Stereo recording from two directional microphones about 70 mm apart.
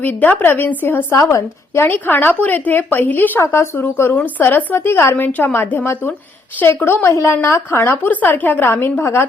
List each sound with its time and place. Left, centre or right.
0.0 s a woman's voice: left
1.1 s speech: left
1.8 s a woman's voice: left